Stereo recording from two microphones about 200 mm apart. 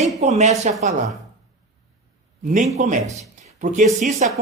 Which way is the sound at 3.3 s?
35° right (ahead or behind).